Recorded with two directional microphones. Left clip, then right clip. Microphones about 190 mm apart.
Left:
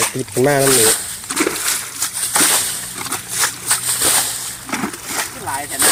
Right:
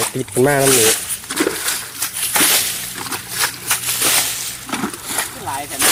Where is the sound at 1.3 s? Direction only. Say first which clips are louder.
Left 1 dB; 30° left (ahead or behind).